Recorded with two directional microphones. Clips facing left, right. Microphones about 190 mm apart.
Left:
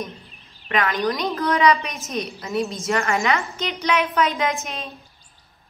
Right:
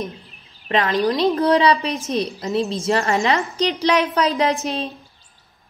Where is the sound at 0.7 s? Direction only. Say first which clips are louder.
Right 3 dB; 30° right (ahead or behind).